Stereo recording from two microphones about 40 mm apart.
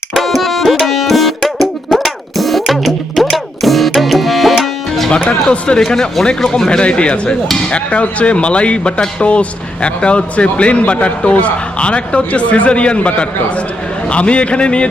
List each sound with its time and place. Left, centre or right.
0.1 s music: centre
5.5 s speech: left
5.8 s speech: centre
6.7 s speech: left